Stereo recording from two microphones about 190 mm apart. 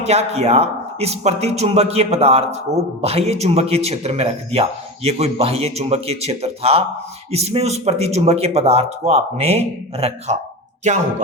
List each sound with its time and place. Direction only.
0.0 s a man's voice: 35° right (ahead or behind)